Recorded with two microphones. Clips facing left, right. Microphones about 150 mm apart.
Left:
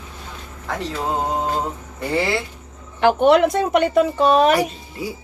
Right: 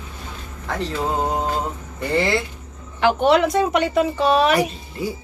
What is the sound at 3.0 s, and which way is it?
A woman's voice, 55° left (ahead or behind).